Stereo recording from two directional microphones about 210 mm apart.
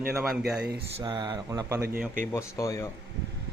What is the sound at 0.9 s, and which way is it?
Speech, 20° right (ahead or behind).